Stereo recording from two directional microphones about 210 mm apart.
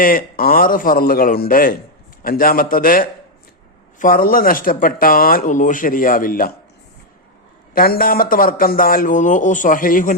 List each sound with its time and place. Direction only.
0.0 s speech: 40° left (ahead or behind)
7.7 s speech: 45° left (ahead or behind)